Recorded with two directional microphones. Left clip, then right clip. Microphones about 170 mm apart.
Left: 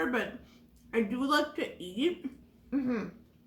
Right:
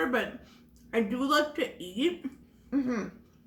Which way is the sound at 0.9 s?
10° right (ahead or behind).